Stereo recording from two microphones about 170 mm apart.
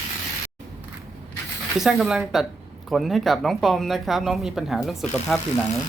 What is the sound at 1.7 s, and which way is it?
Speech, centre (ahead or behind).